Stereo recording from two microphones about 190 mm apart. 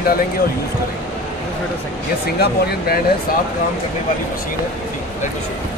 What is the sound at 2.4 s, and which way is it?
Speech, 55° left (ahead or behind).